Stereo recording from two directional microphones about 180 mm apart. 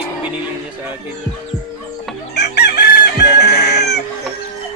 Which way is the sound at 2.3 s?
65° left (ahead or behind).